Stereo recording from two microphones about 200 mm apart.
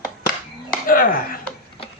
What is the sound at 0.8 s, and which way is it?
Chopping, 45° left (ahead or behind).